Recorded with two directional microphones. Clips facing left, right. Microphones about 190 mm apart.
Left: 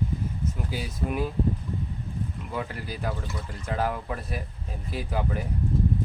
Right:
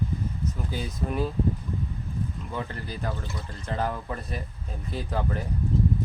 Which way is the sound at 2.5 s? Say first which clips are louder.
Left 1 dB; 10° left (ahead or behind).